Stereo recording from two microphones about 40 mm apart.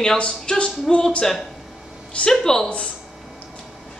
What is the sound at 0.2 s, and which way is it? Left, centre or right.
Speech, left.